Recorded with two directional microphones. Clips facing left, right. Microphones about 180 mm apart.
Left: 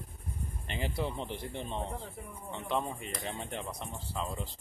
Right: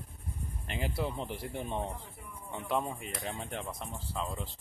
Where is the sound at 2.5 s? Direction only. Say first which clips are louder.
Right 1 dB; 5° right (ahead or behind).